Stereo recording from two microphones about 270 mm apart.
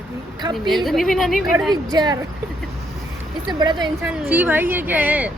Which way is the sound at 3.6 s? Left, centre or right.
Centre.